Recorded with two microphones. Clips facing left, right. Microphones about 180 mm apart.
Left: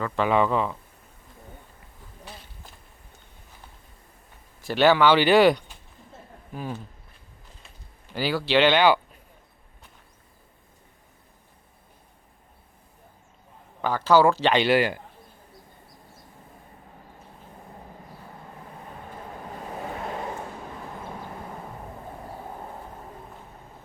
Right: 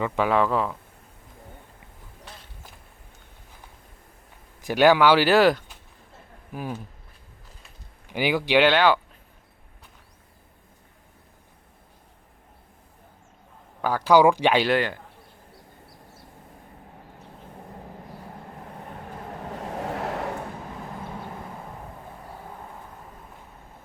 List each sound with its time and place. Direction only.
0.3 s a man's voice: centre (ahead or behind)
4.6 s speech: 10° right (ahead or behind)
8.1 s speech: 15° right (ahead or behind); by 9.0 s centre (ahead or behind)
13.8 s speech: 10° right (ahead or behind)
14.6 s speech: 5° left (ahead or behind)
19.5 s waves: 80° right